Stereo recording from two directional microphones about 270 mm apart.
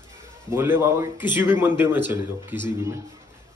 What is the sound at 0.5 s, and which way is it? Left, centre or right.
A man's voice, centre.